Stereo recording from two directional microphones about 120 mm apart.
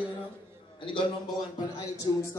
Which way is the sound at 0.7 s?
45° left (ahead or behind).